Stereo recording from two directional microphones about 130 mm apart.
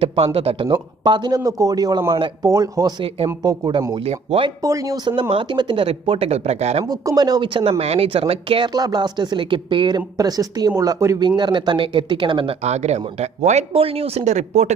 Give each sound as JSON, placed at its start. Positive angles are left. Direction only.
{"t": 0.0, "sound": "speech", "side_deg": -45}
{"t": 1.0, "sound": "a man's voice", "side_deg": -35}
{"t": 4.0, "sound": "speech", "side_deg": -50}
{"t": 4.6, "sound": "a man's voice", "side_deg": -25}
{"t": 6.9, "sound": "speech", "side_deg": -30}
{"t": 12.6, "sound": "speech", "side_deg": -60}